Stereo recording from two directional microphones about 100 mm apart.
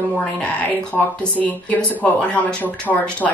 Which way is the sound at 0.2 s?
15° left (ahead or behind).